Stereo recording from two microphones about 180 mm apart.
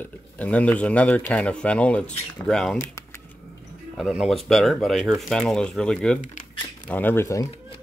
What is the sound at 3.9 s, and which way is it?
Speech, centre (ahead or behind).